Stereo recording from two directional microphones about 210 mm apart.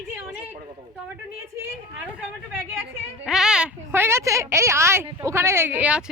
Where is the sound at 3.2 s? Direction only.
Centre (ahead or behind).